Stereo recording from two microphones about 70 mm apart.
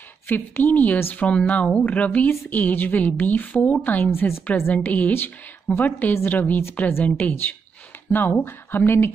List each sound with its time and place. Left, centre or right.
0.3 s a woman's voice: left
4.1 s speech: left
4.7 s a woman's voice: left